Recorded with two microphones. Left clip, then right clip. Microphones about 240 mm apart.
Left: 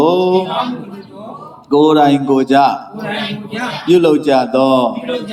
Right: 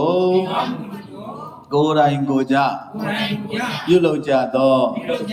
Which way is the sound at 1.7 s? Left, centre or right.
Centre.